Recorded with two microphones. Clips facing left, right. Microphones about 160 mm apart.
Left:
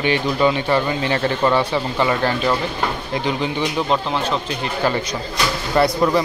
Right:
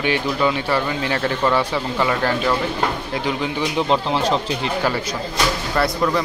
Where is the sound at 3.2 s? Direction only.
5° right (ahead or behind).